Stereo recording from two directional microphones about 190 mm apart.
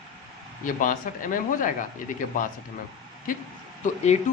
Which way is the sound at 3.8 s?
35° left (ahead or behind).